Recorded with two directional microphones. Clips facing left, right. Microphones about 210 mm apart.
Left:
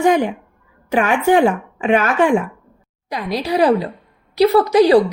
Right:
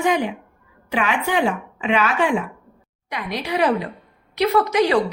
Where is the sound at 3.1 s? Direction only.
35° left (ahead or behind).